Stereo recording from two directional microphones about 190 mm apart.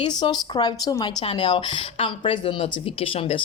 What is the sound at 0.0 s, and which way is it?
A woman's voice, 20° left (ahead or behind).